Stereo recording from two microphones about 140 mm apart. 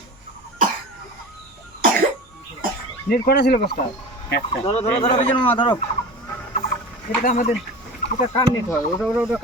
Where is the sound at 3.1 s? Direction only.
90° left.